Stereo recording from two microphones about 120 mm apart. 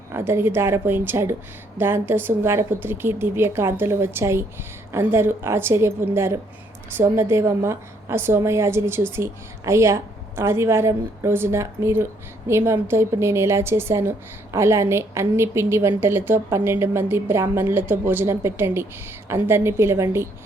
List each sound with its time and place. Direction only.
0.1 s a woman's voice: 20° right (ahead or behind)